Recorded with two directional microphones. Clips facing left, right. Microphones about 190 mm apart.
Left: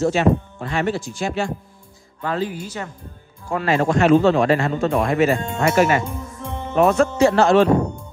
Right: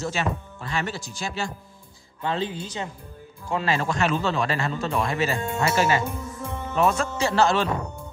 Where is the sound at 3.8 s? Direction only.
45° left (ahead or behind).